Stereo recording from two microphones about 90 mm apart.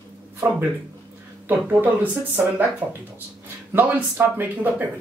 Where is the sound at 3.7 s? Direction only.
20° right (ahead or behind).